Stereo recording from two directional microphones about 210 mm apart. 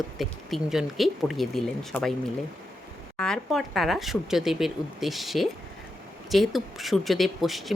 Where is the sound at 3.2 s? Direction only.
5° left (ahead or behind).